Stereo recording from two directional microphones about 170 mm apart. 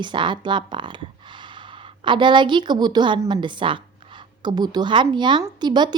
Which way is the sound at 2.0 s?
30° right (ahead or behind).